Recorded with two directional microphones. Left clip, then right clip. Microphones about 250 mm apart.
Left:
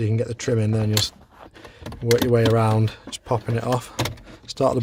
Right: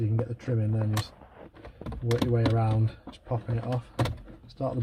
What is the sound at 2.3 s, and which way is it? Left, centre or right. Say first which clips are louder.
Speech: left 10 dB; left.